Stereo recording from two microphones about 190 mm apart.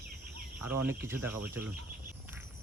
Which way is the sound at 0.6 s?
10° right (ahead or behind).